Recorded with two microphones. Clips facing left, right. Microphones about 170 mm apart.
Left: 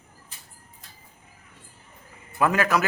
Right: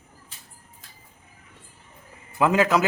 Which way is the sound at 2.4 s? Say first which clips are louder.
Right 2 dB; 20° right (ahead or behind).